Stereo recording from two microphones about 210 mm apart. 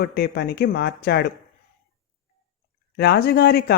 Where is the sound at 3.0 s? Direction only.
50° left (ahead or behind).